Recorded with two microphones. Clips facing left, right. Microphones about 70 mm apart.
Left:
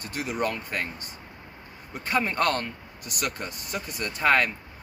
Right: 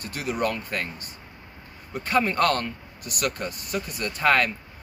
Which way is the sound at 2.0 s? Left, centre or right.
Centre.